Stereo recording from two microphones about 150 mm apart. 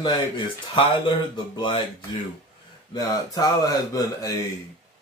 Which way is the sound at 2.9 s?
25° left (ahead or behind).